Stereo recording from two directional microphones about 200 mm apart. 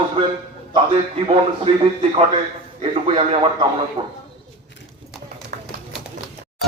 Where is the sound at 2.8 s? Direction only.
30° right (ahead or behind).